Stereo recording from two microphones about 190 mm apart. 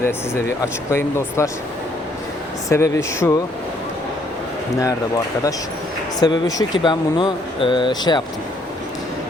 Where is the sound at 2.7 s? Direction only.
15° left (ahead or behind).